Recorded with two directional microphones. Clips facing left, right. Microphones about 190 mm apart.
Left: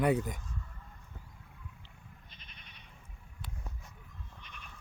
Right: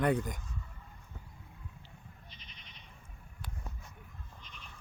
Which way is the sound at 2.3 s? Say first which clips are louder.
Right 1 dB; 50° left (ahead or behind).